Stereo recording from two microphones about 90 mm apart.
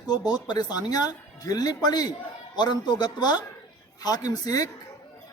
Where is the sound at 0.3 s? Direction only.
50° left (ahead or behind).